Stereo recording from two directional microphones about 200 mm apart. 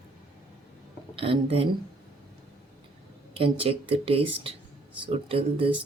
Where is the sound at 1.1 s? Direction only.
25° right (ahead or behind).